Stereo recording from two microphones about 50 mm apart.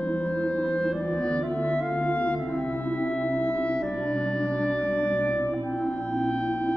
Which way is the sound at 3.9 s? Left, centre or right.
Centre.